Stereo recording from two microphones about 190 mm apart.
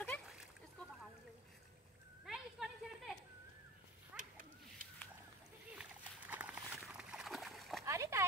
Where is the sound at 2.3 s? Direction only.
Centre (ahead or behind).